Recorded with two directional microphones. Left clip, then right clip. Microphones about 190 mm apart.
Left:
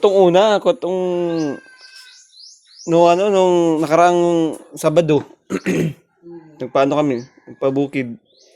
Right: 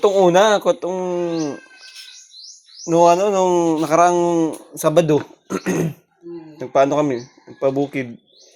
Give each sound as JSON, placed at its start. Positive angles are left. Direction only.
{"t": 0.0, "sound": "speech", "side_deg": 40}
{"t": 2.8, "sound": "speech", "side_deg": 40}